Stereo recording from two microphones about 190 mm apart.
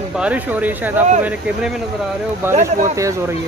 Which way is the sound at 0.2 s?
10° right (ahead or behind).